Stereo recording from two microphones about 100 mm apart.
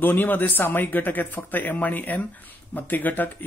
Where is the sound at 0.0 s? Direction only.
20° left (ahead or behind).